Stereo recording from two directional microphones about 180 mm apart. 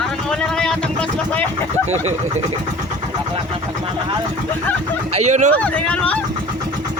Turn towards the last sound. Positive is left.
turn(degrees=5)  # may be behind; listen again after turning